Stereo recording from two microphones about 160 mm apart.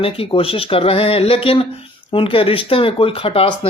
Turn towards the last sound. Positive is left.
turn(degrees=35)  # may be behind; listen again after turning